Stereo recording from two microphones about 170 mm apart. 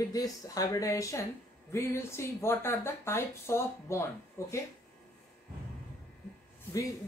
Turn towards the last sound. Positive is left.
turn(degrees=20)  # may be behind; listen again after turning